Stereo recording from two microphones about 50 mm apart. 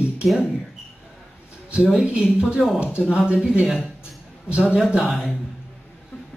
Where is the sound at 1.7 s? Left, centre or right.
Right.